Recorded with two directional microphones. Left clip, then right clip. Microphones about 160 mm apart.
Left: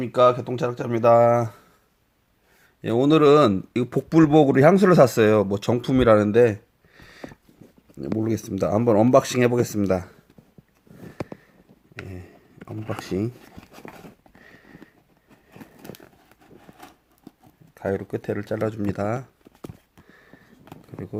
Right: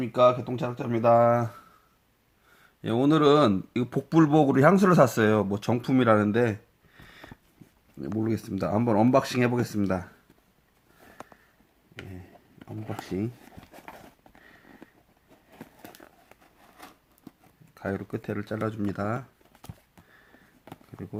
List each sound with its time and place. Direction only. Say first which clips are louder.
0.0 s speech: left 3 dB; 40° left (ahead or behind)
2.8 s speech: left 5 dB; 30° left (ahead or behind)
12.5 s a sound: left 6 dB; 25° left (ahead or behind)
13.0 s speech: left 5 dB; 45° left (ahead or behind)
14.4 s clip-clop: left 4 dB; 35° left (ahead or behind)
15.8 s a sound: left 5 dB; 20° left (ahead or behind)
17.7 s speech: left 6 dB; 25° left (ahead or behind)